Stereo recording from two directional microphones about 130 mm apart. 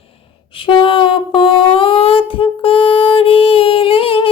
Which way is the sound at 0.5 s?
40° left (ahead or behind).